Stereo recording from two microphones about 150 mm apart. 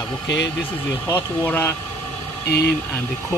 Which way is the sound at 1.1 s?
20° left (ahead or behind).